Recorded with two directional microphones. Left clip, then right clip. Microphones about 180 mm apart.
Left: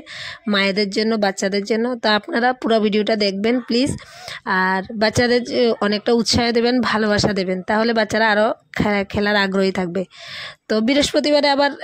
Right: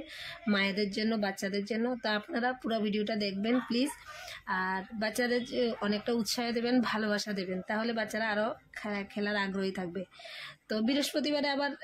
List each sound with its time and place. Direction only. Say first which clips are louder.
0.5 s speech: left 12 dB; 45° left (ahead or behind)